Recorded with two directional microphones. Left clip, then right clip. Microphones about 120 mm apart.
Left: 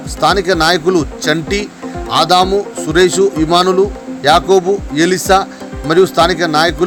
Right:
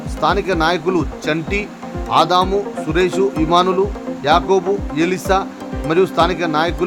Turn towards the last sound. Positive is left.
turn(degrees=20)  # may be behind; listen again after turning